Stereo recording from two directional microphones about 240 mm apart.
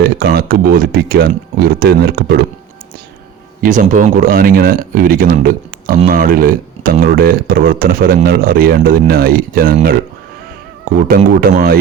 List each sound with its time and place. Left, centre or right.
0.0 s speech: right
3.6 s speech: right